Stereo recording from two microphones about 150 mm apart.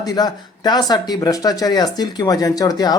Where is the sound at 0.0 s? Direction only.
25° left (ahead or behind).